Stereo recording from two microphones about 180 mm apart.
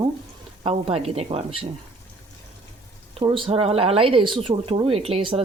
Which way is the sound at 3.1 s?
30° right (ahead or behind).